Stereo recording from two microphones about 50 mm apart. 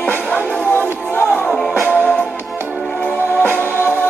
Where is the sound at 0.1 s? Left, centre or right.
Left.